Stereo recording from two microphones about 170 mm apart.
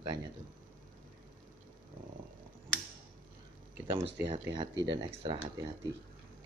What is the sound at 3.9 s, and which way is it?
Speech, 30° right (ahead or behind).